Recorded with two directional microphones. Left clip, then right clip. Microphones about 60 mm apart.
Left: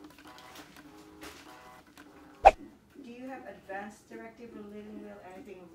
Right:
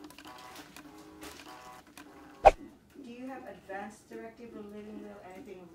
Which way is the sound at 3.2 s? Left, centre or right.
Centre.